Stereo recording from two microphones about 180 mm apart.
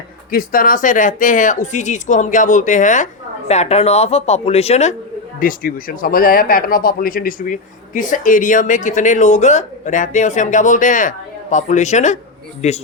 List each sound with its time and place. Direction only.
0.3 s speech: 50° left (ahead or behind)
5.4 s speech: 50° left (ahead or behind)